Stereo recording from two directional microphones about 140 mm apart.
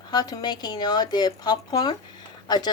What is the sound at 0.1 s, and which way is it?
Speech, 30° left (ahead or behind).